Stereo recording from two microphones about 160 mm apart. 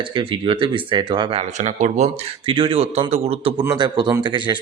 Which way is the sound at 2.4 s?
35° right (ahead or behind).